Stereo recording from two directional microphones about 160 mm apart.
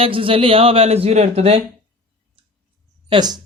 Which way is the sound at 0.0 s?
35° right (ahead or behind).